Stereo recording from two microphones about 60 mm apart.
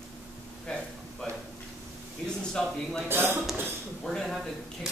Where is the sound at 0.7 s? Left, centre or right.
Centre.